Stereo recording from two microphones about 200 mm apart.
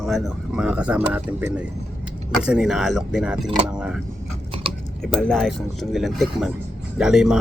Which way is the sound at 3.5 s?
25° right (ahead or behind).